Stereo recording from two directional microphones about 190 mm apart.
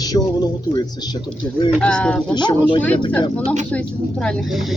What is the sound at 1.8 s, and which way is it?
Speech, 5° left (ahead or behind).